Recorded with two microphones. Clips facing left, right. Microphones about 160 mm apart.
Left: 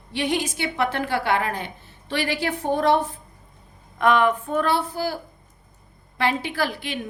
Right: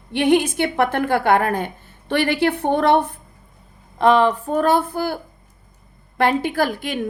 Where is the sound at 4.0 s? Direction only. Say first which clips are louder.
Right 4 dB; 30° right (ahead or behind); by 5.2 s 55° right (ahead or behind).